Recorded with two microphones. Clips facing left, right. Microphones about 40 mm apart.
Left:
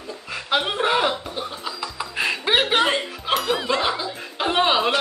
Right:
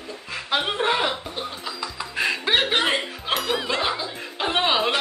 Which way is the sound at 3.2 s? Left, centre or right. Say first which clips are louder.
Left 4 dB; centre.